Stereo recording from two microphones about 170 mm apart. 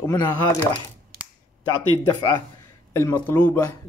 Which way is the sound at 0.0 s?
15° left (ahead or behind).